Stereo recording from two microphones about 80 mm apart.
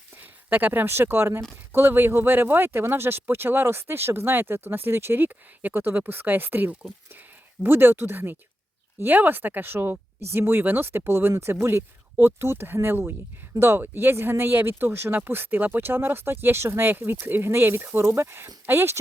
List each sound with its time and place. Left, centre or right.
0.5 s speech: right